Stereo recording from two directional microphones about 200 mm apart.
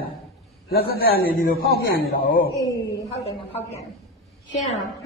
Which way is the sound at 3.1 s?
30° left (ahead or behind).